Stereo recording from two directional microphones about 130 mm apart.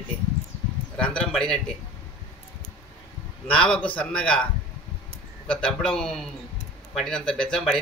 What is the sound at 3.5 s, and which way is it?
Speech, 5° left (ahead or behind).